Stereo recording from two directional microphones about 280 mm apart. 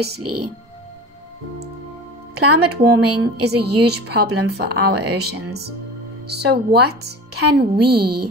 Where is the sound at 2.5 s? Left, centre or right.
Right.